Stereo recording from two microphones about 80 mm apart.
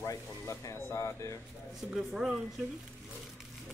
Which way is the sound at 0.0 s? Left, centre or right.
Left.